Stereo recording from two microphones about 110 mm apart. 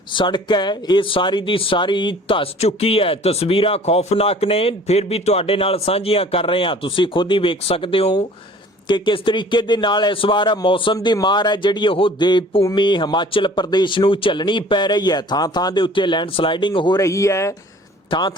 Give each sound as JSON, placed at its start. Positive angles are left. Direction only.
{"t": 0.1, "sound": "speech", "side_deg": 45}
{"t": 17.0, "sound": "speech", "side_deg": 30}
{"t": 18.1, "sound": "a man's voice", "side_deg": 40}